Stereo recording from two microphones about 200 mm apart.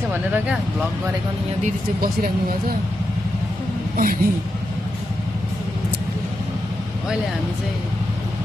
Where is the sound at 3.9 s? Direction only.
45° right (ahead or behind).